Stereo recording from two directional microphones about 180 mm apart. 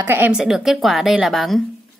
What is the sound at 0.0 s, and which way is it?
A woman's voice, 10° right (ahead or behind).